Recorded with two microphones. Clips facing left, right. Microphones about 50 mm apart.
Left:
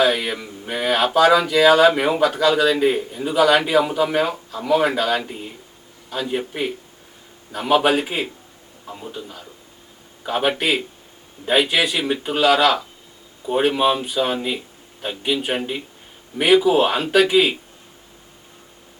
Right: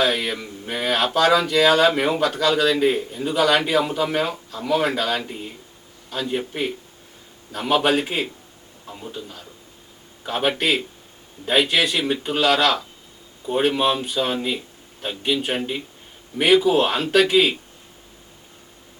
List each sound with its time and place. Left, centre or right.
0.0 s a man's voice: centre